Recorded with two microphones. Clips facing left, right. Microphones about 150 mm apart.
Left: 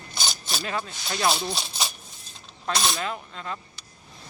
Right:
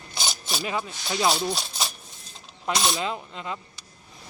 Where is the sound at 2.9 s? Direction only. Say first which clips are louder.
Right 2 dB; 20° right (ahead or behind).